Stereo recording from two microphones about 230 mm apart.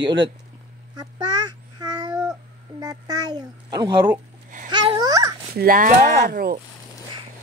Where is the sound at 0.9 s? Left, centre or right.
Centre.